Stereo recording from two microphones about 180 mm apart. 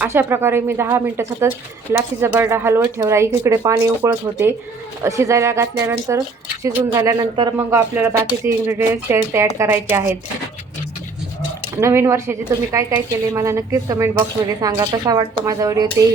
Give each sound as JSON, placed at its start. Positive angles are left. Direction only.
{"t": 0.0, "sound": "speech", "side_deg": -10}
{"t": 11.8, "sound": "a woman's voice", "side_deg": -15}